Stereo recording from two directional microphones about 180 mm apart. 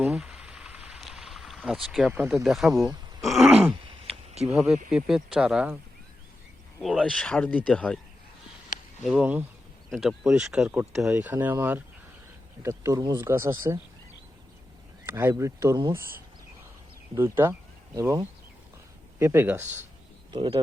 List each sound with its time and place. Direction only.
0.0 s a sound: 5° right (ahead or behind)
3.2 s groan: centre (ahead or behind)
4.4 s speech: 5° right (ahead or behind)
9.0 s speech: 5° right (ahead or behind)
15.0 s speech: 15° right (ahead or behind)
17.2 s speech: 15° right (ahead or behind)
19.2 s speech: 15° right (ahead or behind)
20.3 s speech: 25° right (ahead or behind)